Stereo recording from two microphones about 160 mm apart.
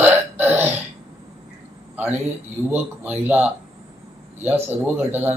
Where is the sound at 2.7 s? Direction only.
15° right (ahead or behind).